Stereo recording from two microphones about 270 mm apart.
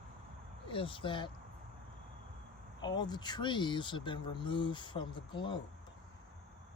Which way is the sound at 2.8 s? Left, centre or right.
Centre.